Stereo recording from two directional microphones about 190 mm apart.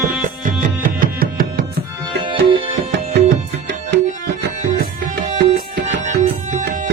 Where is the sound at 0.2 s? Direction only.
45° right (ahead or behind).